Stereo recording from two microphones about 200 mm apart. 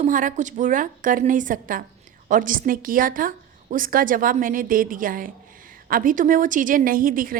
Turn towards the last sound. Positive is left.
turn(degrees=-45)  # may be behind; listen again after turning